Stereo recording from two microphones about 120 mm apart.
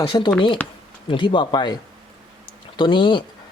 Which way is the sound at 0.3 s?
40° left (ahead or behind).